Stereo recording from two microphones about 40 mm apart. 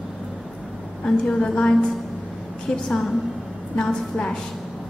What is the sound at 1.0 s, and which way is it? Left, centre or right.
Speech, left.